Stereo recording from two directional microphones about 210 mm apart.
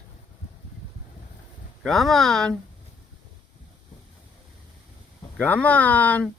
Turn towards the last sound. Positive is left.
turn(degrees=5)  # may be behind; listen again after turning